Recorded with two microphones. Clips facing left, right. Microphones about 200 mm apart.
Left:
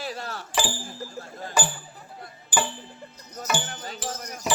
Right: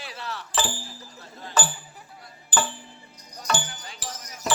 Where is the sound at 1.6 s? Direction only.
10° left (ahead or behind).